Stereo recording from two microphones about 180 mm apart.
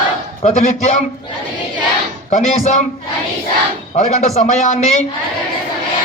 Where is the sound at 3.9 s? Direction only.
40° left (ahead or behind).